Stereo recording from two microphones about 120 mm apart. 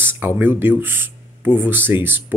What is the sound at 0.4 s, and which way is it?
Speech, 15° right (ahead or behind).